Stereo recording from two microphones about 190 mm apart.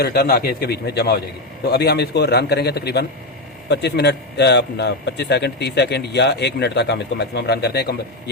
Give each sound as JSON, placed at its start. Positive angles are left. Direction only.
{"t": 0.0, "sound": "a man's voice", "side_deg": 55}